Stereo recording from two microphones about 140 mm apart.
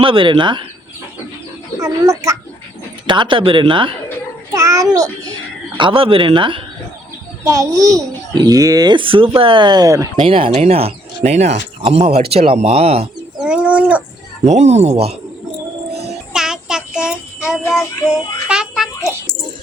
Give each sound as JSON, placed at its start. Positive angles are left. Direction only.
{"t": 0.0, "sound": "speech", "side_deg": -40}
{"t": 1.8, "sound": "a child's voice", "side_deg": -25}
{"t": 3.1, "sound": "speech", "side_deg": -35}
{"t": 4.5, "sound": "a child's voice", "side_deg": -20}
{"t": 5.7, "sound": "speech", "side_deg": -40}
{"t": 7.4, "sound": "a child's voice", "side_deg": -25}
{"t": 10.2, "sound": "speech", "side_deg": -40}
{"t": 13.4, "sound": "bird", "side_deg": -10}
{"t": 14.4, "sound": "speech", "side_deg": -55}
{"t": 16.3, "sound": "child singing", "side_deg": -5}